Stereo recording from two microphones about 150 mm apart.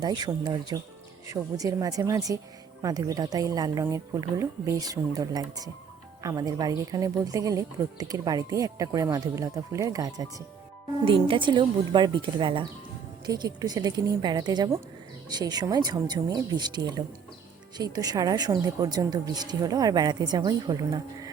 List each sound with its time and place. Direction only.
0.0 s speech: 25° right (ahead or behind)
11.0 s speech: 35° right (ahead or behind)